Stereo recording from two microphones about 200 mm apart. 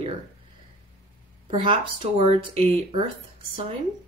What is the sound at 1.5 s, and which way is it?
Speech, 25° right (ahead or behind).